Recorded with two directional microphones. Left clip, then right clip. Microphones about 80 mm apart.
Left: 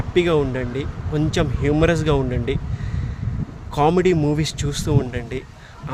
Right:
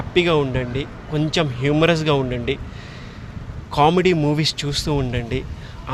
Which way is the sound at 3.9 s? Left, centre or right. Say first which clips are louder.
Even; left.